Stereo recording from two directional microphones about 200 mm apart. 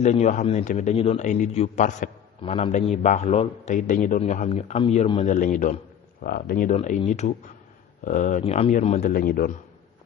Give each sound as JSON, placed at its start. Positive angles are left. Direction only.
{"t": 0.0, "sound": "a man's voice", "side_deg": 35}
{"t": 9.0, "sound": "speech", "side_deg": 45}